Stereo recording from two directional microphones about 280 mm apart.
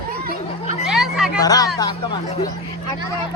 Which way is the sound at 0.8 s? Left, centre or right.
Centre.